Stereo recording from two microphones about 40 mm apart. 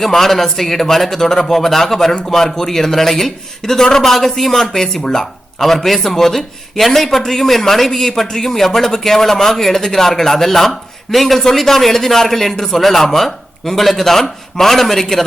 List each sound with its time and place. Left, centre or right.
0.0 s speech: centre